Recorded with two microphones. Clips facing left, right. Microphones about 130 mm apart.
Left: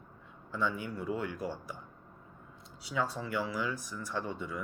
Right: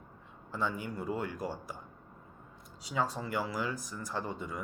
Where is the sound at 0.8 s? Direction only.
45° right (ahead or behind).